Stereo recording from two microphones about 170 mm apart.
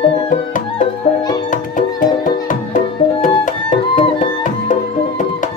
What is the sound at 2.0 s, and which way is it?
Music, 55° left (ahead or behind).